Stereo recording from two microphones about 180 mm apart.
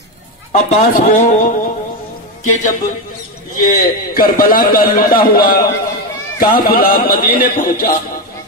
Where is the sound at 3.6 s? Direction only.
55° left (ahead or behind).